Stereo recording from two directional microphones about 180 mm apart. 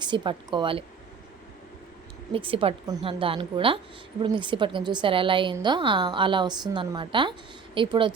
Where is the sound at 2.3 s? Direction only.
30° right (ahead or behind).